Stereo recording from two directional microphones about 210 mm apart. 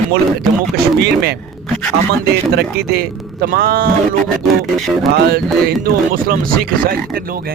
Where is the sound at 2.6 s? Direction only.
50° right (ahead or behind).